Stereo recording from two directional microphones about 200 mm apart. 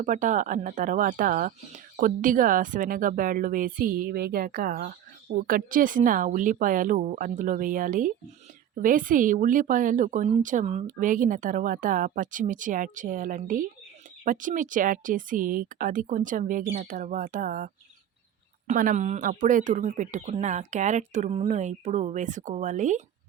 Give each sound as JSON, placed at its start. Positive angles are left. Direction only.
{"t": 0.0, "sound": "speech", "side_deg": -40}
{"t": 18.7, "sound": "speech", "side_deg": -40}